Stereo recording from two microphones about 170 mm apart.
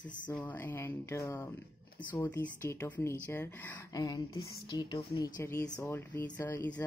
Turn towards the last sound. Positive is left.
turn(degrees=10)  # may be behind; listen again after turning